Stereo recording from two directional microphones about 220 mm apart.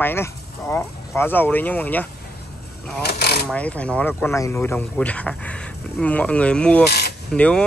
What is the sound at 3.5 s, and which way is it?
Speech, 5° left (ahead or behind).